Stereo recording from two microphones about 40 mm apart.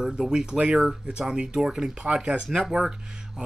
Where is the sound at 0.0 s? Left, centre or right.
Centre.